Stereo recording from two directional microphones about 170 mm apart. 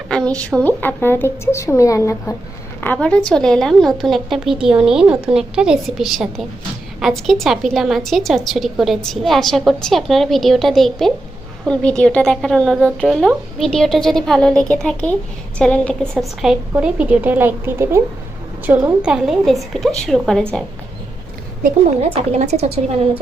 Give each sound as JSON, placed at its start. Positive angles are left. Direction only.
{"t": 0.1, "sound": "a woman's voice", "side_deg": 5}
{"t": 22.1, "sound": "speech", "side_deg": -40}